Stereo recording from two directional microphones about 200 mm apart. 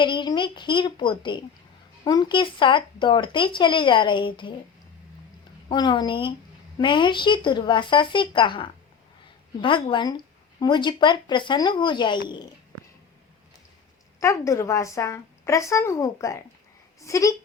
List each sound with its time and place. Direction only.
0.0 s speech: 25° left (ahead or behind)
5.6 s speech: 20° left (ahead or behind)
14.2 s a woman's voice: 15° left (ahead or behind)